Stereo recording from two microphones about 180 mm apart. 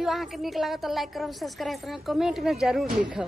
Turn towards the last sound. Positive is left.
turn(degrees=-5)  # may be behind; listen again after turning